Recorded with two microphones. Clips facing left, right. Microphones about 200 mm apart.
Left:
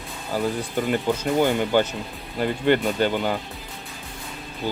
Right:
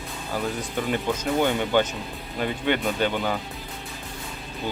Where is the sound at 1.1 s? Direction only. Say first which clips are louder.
Left 1 dB; 5° left (ahead or behind).